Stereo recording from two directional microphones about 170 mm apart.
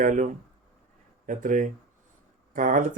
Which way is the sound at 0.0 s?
50° right (ahead or behind).